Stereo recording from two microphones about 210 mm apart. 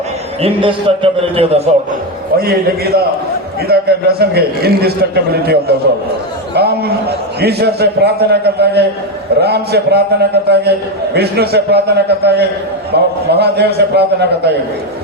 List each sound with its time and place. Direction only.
0.4 s a man's voice: 25° right (ahead or behind)
2.4 s a man's voice: 45° right (ahead or behind)